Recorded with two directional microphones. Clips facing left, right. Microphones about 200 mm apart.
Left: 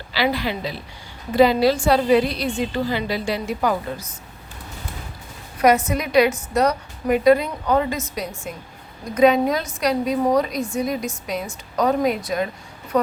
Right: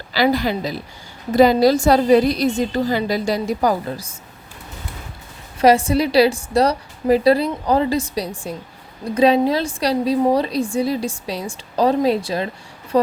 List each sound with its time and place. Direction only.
0.1 s a woman's voice: 45° right (ahead or behind)
5.5 s a woman's voice: 30° right (ahead or behind)